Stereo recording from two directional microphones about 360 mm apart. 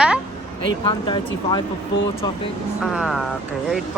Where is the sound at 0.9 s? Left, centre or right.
Centre.